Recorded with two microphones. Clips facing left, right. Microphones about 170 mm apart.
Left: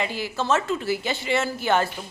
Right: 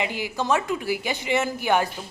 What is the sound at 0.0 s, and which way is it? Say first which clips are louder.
A woman's voice: even; 15° right (ahead or behind).